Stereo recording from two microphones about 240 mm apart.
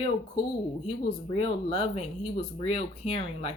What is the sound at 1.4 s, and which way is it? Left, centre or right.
Speech, left.